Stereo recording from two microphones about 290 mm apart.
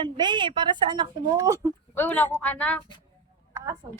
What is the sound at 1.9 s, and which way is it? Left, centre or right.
Speech, centre.